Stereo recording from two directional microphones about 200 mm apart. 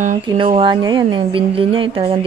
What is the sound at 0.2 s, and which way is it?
Speech, 25° right (ahead or behind).